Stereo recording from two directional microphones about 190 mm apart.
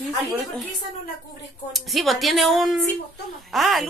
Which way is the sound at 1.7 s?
Centre (ahead or behind).